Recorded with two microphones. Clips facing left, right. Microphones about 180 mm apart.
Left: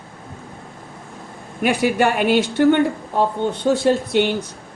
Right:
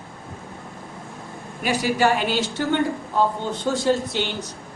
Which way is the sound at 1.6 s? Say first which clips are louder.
Left 3 dB; 55° left (ahead or behind).